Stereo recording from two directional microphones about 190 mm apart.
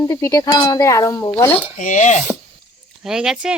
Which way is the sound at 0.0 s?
15° left (ahead or behind).